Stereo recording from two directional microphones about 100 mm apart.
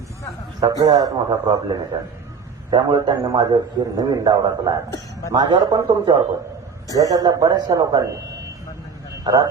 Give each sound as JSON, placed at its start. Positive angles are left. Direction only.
{"t": 0.6, "sound": "a man's voice", "side_deg": -40}
{"t": 1.3, "sound": "a man's voice", "side_deg": -60}
{"t": 2.6, "sound": "a man's voice", "side_deg": -45}
{"t": 7.0, "sound": "a man's voice", "side_deg": -35}
{"t": 9.2, "sound": "a man's voice", "side_deg": -40}